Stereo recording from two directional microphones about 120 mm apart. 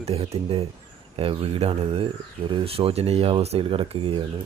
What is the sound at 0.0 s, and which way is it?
Speech, 55° right (ahead or behind).